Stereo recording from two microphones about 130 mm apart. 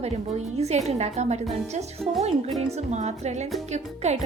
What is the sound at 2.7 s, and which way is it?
Speech, 60° right (ahead or behind).